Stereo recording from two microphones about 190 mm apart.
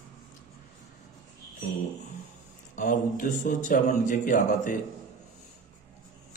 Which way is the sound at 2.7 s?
45° left (ahead or behind).